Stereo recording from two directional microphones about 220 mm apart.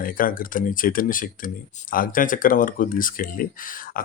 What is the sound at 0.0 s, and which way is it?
Speech, 40° left (ahead or behind).